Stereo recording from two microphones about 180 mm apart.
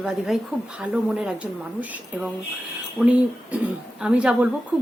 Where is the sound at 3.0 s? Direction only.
Centre (ahead or behind).